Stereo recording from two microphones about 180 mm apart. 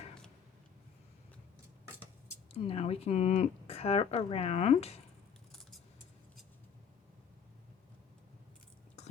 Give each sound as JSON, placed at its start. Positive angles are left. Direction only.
{"t": 2.5, "sound": "speech", "side_deg": 35}